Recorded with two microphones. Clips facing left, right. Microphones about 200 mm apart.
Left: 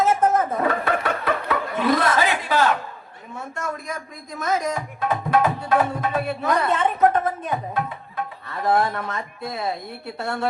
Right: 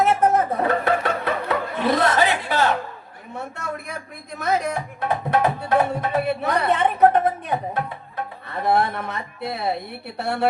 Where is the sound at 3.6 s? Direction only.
65° right (ahead or behind).